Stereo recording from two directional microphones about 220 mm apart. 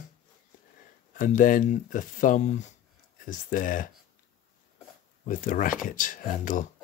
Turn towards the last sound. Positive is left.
turn(degrees=40)  # may be behind; listen again after turning